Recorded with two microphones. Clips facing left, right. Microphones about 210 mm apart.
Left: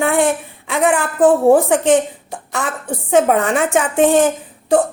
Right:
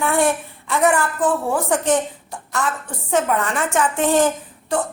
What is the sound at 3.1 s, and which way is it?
Speech, 60° left (ahead or behind).